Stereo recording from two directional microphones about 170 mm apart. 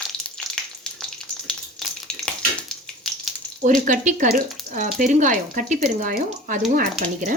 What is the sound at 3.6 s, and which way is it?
Speech, 50° right (ahead or behind).